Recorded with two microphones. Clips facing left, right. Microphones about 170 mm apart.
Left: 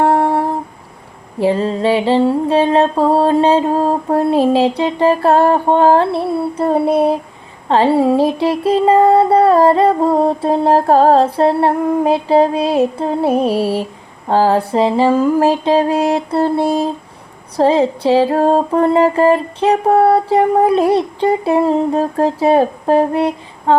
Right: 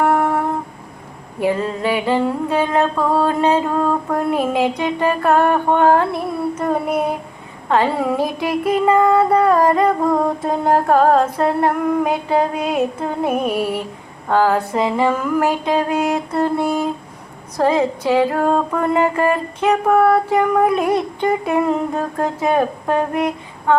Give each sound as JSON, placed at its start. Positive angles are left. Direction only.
{"t": 0.0, "sound": "humming", "side_deg": 30}
{"t": 1.4, "sound": "mantra", "side_deg": 30}
{"t": 6.6, "sound": "music", "side_deg": 30}